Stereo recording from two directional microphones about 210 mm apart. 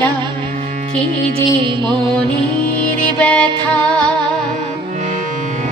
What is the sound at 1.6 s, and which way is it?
Music, 20° right (ahead or behind).